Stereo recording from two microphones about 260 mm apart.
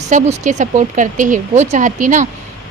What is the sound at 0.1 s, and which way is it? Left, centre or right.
A woman's voice, right.